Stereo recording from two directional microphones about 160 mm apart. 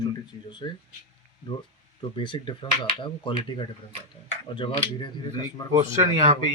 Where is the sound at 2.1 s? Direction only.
30° left (ahead or behind).